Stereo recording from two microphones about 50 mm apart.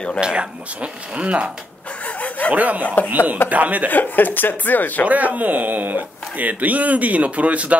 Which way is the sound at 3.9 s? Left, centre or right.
Left.